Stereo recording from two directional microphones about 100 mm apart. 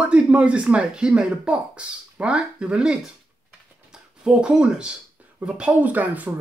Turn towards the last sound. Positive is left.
turn(degrees=-15)  # may be behind; listen again after turning